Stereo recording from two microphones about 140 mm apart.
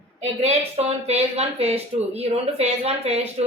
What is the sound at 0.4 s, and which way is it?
Speech, 50° right (ahead or behind).